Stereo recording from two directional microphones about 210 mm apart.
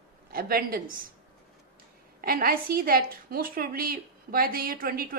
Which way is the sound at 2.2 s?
45° right (ahead or behind).